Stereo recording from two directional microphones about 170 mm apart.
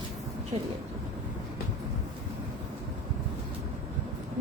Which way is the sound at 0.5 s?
35° right (ahead or behind).